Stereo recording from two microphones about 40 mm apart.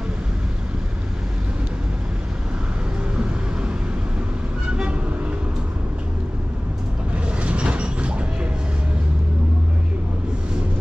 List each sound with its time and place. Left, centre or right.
7.4 s train: right